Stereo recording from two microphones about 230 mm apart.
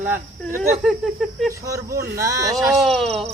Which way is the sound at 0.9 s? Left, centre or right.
Centre.